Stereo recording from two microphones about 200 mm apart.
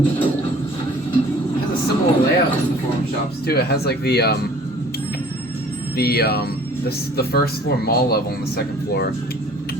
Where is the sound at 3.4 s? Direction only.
50° left (ahead or behind).